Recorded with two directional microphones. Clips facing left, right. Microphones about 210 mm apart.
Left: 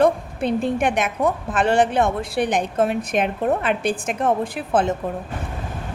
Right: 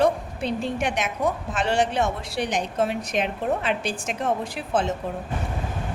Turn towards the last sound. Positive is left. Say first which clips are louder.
# left 4 dB
turn(degrees=55)  # may be behind; listen again after turning